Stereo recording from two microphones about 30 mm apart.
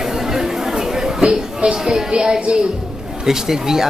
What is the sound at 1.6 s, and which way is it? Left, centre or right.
Speech, right.